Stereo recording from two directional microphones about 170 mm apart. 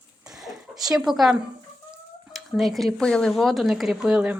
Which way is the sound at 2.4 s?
Centre (ahead or behind).